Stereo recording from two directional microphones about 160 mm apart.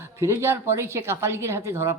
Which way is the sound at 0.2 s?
15° right (ahead or behind).